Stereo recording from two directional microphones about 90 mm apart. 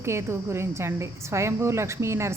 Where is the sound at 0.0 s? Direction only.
30° right (ahead or behind).